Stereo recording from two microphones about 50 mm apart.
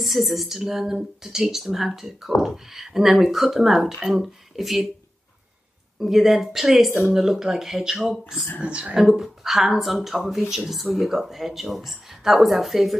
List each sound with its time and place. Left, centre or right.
0.0 s speech: centre
5.9 s speech: centre
8.5 s speech: right
9.2 s speech: centre